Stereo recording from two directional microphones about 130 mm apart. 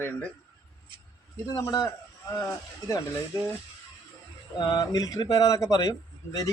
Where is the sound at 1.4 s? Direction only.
25° left (ahead or behind).